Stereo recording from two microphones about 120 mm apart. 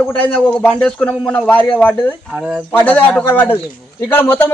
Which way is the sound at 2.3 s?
5° right (ahead or behind).